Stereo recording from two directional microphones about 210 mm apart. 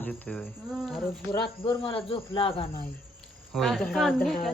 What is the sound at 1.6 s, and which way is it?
Speech, 25° left (ahead or behind).